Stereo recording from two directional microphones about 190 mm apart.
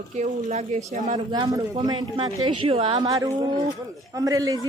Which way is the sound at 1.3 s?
25° right (ahead or behind).